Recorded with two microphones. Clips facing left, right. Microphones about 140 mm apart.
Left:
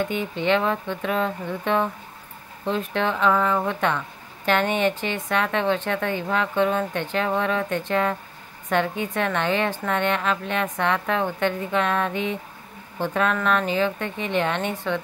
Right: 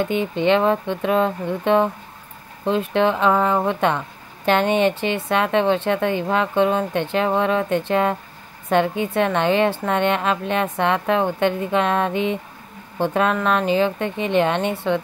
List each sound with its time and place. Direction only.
0.1 s a woman's voice: 30° right (ahead or behind)